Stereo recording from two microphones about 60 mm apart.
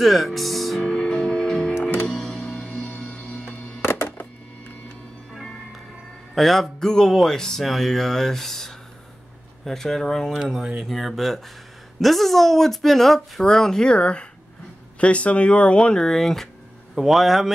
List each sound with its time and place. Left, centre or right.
0.0 s speech: centre
0.8 s music: centre
1.8 s music: left
2.0 s music: centre
3.8 s music: left
6.3 s speech: centre